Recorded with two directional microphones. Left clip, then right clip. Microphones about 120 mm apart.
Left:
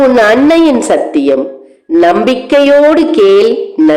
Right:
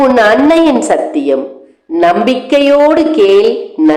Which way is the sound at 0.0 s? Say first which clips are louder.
Left 1 dB; 40° left (ahead or behind).